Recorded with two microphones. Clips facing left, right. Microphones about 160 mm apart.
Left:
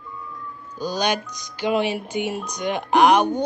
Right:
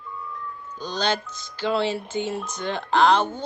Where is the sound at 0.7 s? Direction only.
10° left (ahead or behind).